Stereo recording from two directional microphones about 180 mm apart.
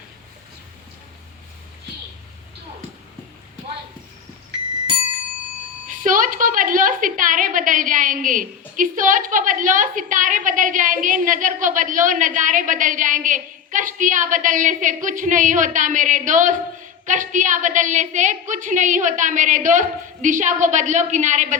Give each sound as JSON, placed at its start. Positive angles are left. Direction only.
{"t": 5.9, "sound": "a woman's voice", "side_deg": -45}